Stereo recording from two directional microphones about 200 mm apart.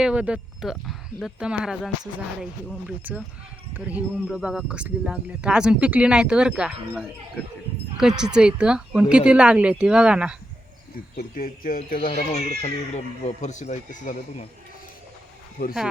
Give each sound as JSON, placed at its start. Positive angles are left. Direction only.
{"t": 0.0, "sound": "speech", "side_deg": -5}
{"t": 11.2, "sound": "speech", "side_deg": 45}